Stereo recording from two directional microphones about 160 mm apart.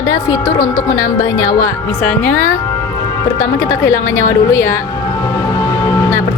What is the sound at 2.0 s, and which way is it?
Speech, 10° left (ahead or behind).